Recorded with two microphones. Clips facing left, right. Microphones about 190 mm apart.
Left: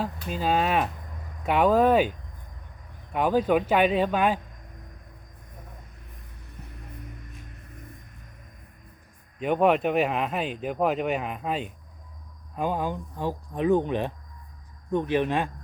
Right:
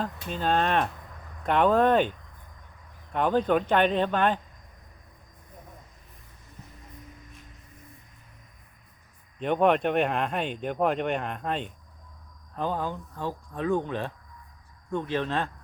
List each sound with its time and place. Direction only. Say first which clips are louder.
0.0 s speech: left 1 dB; 5° left (ahead or behind)
6.6 s music: left 3 dB; 60° left (ahead or behind)
9.4 s speech: left 1 dB; 5° left (ahead or behind)